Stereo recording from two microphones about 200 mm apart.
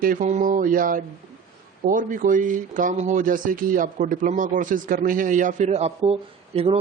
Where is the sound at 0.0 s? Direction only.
40° right (ahead or behind).